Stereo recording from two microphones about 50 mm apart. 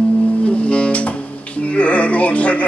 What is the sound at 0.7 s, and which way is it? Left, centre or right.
Music, left.